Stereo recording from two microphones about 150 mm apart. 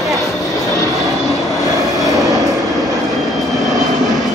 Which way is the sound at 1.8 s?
25° right (ahead or behind).